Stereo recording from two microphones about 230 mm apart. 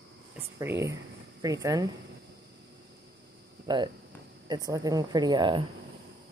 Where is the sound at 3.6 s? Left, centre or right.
Centre.